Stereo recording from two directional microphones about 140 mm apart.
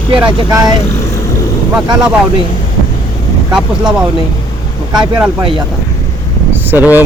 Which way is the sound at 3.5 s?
5° right (ahead or behind).